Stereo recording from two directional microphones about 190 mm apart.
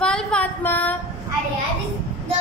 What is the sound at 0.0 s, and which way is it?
Female singing, 5° left (ahead or behind).